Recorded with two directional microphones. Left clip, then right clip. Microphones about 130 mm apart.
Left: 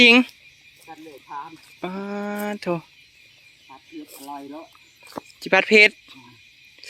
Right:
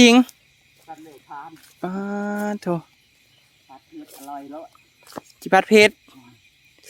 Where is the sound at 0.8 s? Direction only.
5° right (ahead or behind).